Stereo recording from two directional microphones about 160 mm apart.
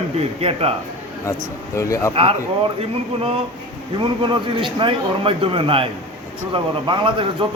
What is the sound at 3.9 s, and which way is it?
A man's voice, 30° right (ahead or behind).